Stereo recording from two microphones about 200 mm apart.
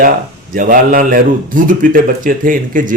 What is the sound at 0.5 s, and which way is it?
A man's voice, 45° right (ahead or behind).